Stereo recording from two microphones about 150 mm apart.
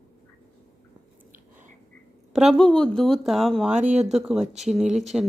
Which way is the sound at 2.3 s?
Centre (ahead or behind).